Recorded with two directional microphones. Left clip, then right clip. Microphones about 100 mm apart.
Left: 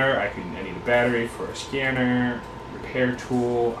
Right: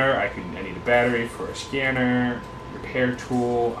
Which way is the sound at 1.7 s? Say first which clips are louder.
Right 1 dB; 15° right (ahead or behind).